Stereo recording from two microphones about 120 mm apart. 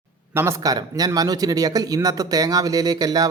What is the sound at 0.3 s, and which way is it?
Speech, 25° right (ahead or behind).